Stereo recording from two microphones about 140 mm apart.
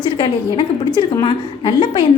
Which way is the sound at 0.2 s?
35° left (ahead or behind).